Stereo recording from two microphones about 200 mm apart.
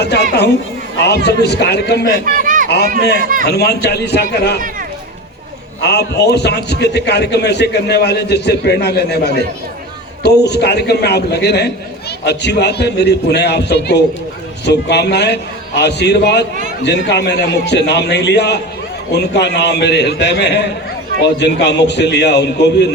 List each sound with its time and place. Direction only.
0.0 s a man's voice: 55° left (ahead or behind)
2.2 s a sound: 45° right (ahead or behind)
3.2 s a man's voice: 45° right (ahead or behind)
3.4 s a man's voice: 55° left (ahead or behind)
5.8 s a man's voice: 55° left (ahead or behind)